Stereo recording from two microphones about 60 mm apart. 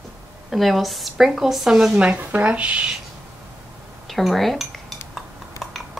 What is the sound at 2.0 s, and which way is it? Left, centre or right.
Speech, right.